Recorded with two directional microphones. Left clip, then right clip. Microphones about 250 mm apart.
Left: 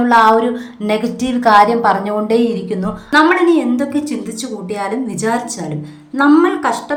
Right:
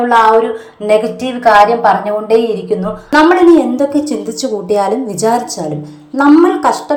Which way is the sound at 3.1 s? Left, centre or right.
Centre.